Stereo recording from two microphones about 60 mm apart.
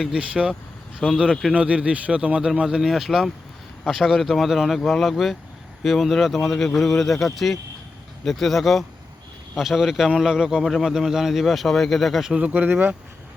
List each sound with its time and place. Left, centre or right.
0.0 s speech: centre
12.3 s speech: right